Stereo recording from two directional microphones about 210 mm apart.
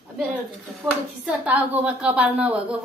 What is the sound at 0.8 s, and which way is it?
Speech, centre (ahead or behind).